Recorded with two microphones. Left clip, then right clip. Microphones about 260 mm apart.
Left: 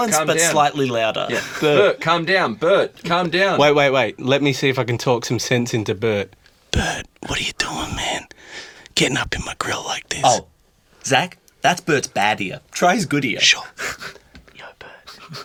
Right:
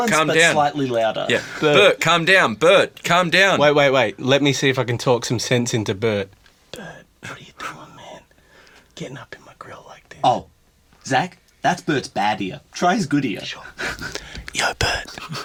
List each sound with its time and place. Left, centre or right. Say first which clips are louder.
0.5 s speech: left 1 dB; left
1.8 s speech: right 2 dB; right
3.6 s speech: left 1 dB; centre
3.8 s speech: even; centre
6.7 s whispering: left 14 dB; left
9.0 s speech: left 16 dB; left
9.5 s speech: left 15 dB; left
10.1 s speech: left 1 dB; left
14.4 s speech: right 19 dB; right